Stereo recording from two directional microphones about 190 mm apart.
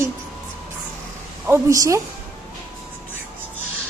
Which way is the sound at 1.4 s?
15° right (ahead or behind).